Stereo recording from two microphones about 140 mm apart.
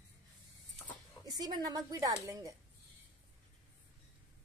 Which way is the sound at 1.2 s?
30° right (ahead or behind).